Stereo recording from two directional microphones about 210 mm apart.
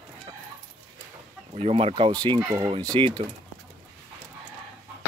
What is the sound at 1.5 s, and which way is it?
Speech, 30° right (ahead or behind).